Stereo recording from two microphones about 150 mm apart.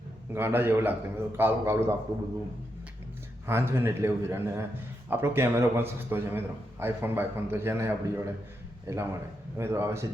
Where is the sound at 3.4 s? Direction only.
15° right (ahead or behind).